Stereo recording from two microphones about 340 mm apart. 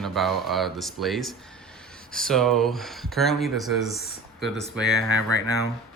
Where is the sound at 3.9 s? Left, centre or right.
Left.